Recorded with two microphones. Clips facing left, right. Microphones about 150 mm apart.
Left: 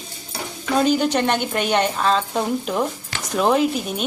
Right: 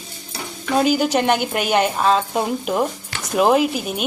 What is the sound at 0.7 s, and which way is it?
A woman's voice, 10° right (ahead or behind).